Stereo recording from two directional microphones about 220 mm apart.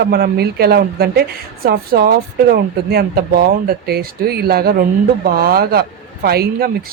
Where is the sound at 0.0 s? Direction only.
45° right (ahead or behind).